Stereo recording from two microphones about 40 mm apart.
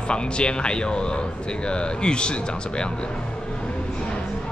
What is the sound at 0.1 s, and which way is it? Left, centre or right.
Speech, left.